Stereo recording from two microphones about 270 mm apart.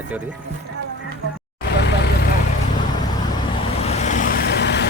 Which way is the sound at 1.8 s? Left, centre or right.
Left.